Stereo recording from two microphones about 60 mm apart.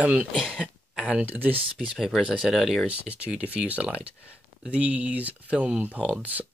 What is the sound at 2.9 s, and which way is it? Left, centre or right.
Speech, right.